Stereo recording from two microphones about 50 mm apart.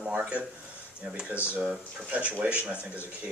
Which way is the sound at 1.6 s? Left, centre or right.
Right.